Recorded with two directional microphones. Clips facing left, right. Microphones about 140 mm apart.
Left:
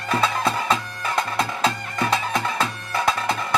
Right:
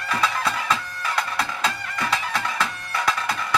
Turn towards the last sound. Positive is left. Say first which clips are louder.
# left 2 dB
turn(degrees=25)  # may be behind; listen again after turning